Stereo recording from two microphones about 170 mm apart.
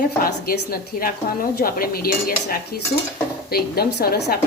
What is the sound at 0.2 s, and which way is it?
A woman's voice, 60° left (ahead or behind).